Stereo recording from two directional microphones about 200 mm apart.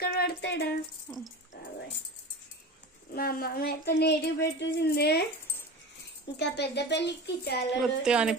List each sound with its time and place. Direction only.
0.0 s a sound: 50° left (ahead or behind)
1.1 s speech: 10° left (ahead or behind)
1.5 s dog: 50° left (ahead or behind)
3.2 s speech: 45° left (ahead or behind)
6.4 s speech: 55° left (ahead or behind)
7.8 s a woman's voice: 5° right (ahead or behind)